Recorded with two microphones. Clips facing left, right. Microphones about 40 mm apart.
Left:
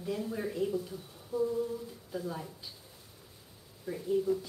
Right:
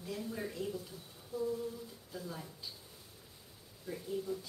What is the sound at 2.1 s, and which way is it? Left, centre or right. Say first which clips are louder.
Speech: left 7 dB; centre.